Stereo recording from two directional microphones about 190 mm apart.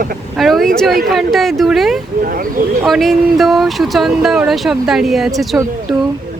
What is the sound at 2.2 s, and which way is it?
Speech, 50° right (ahead or behind).